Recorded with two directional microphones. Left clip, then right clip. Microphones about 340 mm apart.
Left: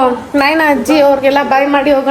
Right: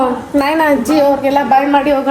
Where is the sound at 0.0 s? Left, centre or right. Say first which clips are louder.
Left 3 dB; centre.